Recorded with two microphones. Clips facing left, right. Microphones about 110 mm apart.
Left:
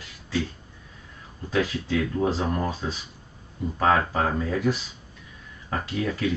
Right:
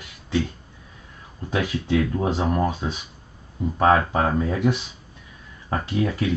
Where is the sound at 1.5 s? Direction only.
20° right (ahead or behind).